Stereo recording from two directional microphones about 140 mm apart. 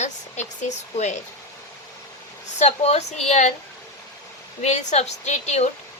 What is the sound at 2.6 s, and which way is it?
Speech, 50° left (ahead or behind).